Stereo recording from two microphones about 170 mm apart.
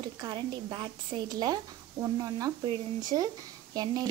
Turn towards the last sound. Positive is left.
turn(degrees=-20)  # may be behind; listen again after turning